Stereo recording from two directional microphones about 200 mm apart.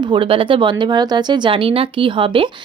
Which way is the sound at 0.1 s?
25° right (ahead or behind).